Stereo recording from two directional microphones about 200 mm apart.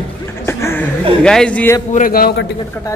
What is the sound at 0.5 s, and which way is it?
Chuckle, 10° left (ahead or behind).